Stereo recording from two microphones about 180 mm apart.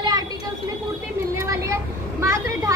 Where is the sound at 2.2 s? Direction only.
15° right (ahead or behind).